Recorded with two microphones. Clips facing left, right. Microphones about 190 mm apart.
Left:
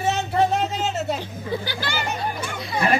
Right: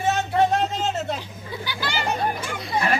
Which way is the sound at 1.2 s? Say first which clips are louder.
Left 6 dB; 50° left (ahead or behind).